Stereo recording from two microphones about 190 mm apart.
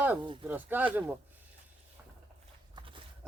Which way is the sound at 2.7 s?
25° right (ahead or behind).